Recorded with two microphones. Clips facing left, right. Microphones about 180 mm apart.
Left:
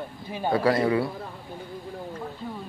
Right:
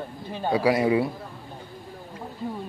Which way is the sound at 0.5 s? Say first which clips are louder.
Right 1 dB; 10° right (ahead or behind).